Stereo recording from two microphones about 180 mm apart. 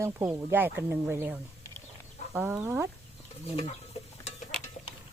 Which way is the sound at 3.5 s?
35° left (ahead or behind).